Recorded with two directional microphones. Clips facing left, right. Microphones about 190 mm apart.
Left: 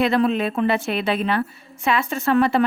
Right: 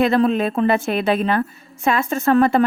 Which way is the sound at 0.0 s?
45° right (ahead or behind).